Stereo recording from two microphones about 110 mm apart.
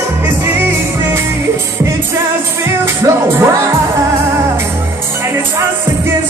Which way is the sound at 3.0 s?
25° right (ahead or behind).